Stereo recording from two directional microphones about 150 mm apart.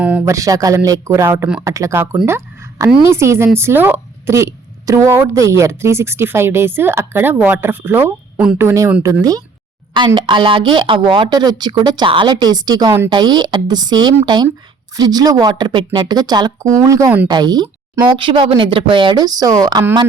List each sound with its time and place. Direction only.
0.0 s speech: 10° right (ahead or behind)
0.3 s a woman's voice: 20° right (ahead or behind)
10.2 s speech: 30° right (ahead or behind)